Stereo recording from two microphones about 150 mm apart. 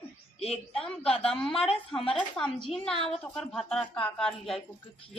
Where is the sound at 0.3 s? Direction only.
45° left (ahead or behind).